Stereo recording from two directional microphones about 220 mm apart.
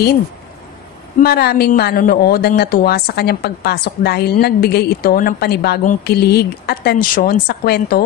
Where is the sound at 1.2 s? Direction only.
45° left (ahead or behind).